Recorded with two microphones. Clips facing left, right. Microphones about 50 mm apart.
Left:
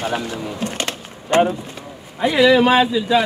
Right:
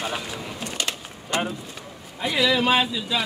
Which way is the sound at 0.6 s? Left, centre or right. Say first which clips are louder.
Left 5 dB; left.